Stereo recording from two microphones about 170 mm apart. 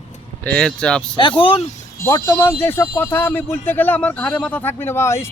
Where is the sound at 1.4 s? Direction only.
30° left (ahead or behind).